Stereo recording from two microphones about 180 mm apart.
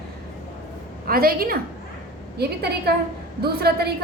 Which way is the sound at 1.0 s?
55° right (ahead or behind).